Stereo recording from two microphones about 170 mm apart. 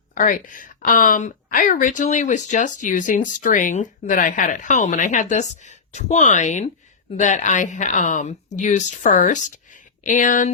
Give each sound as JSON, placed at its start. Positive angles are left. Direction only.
{"t": 0.1, "sound": "speech", "side_deg": 50}